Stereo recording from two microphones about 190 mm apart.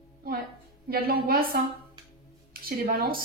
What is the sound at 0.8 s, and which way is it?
A woman's voice, 50° right (ahead or behind).